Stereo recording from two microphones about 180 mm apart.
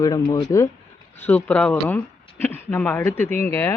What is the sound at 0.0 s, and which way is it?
Speech, 20° left (ahead or behind).